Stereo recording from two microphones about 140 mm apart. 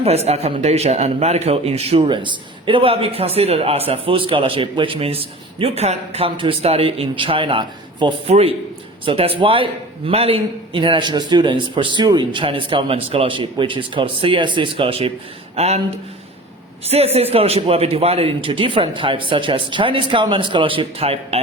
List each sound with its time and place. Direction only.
0.3 s a man's voice: 50° right (ahead or behind)
16.8 s a man's voice: 45° right (ahead or behind)